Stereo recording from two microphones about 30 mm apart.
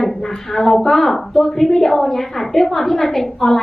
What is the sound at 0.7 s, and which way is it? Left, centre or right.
Speech, left.